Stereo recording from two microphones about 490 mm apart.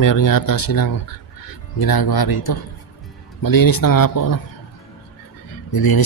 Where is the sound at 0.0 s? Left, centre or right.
Left.